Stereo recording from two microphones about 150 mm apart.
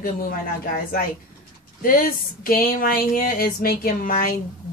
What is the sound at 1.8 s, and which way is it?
Speech, 70° left (ahead or behind).